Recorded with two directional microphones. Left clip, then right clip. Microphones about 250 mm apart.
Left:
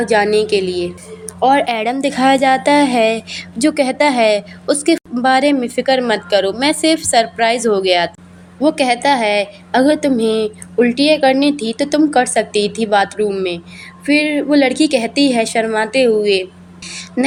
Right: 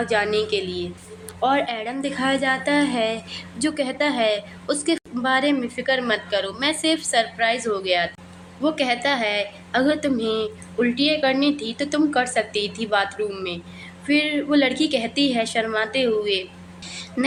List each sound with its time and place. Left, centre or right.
0.0 s a woman's voice: left